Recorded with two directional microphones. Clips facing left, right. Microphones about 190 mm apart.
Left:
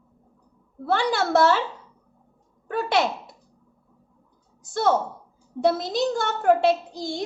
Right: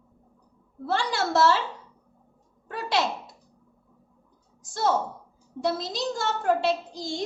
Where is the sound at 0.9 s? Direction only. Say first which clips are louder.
Left 4 dB; 60° left (ahead or behind).